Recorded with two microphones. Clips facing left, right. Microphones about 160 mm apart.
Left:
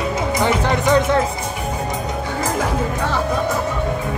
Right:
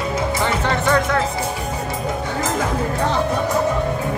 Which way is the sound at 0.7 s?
20° left (ahead or behind).